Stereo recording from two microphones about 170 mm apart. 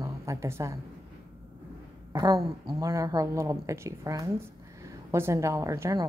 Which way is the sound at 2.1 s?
20° right (ahead or behind).